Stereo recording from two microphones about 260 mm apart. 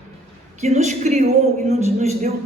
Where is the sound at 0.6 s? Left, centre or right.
Right.